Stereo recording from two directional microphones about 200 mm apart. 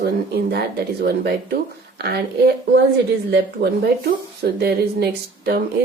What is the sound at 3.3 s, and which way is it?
Speech, 55° right (ahead or behind).